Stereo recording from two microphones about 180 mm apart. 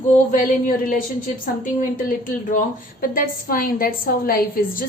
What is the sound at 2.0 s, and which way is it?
A woman's voice, 50° left (ahead or behind).